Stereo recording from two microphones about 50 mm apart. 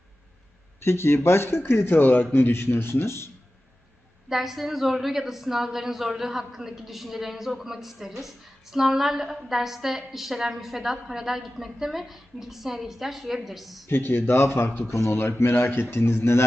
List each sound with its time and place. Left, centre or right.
0.8 s speech: left
2.0 s a man's voice: left
4.3 s a woman's voice: centre
13.8 s speech: left
14.8 s speech: left
15.2 s speech: left